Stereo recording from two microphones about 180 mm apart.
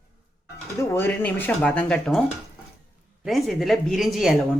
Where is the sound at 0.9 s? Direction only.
10° left (ahead or behind).